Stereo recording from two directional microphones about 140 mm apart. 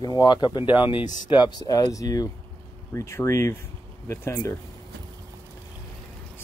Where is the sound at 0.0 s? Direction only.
30° left (ahead or behind).